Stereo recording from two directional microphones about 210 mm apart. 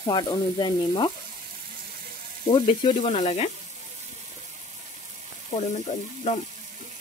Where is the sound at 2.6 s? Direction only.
25° left (ahead or behind).